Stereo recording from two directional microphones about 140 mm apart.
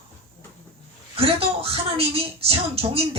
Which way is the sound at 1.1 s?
45° right (ahead or behind).